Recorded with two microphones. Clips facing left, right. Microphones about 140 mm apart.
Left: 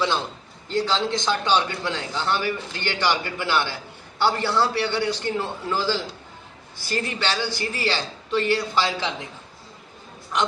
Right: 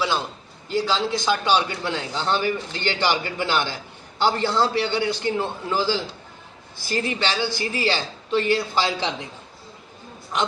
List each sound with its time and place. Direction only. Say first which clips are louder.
0.7 s a man's voice: even; 5° right (ahead or behind)